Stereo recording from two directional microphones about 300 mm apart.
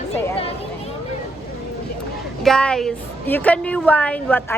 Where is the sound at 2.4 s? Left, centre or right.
Centre.